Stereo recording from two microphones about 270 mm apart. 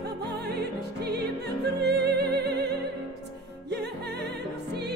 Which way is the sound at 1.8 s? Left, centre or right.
Right.